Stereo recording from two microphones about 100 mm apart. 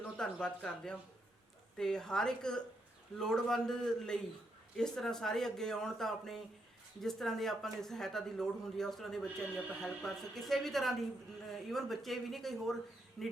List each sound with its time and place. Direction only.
0.2 s speech: 10° left (ahead or behind)